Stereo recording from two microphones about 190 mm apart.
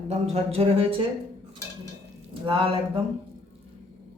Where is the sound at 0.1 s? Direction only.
30° right (ahead or behind).